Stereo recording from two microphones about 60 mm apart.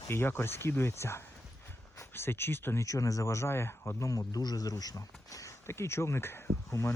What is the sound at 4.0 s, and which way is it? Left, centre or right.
Speech, left.